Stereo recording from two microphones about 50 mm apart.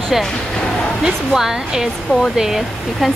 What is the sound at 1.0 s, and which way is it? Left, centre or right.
A woman's voice, centre.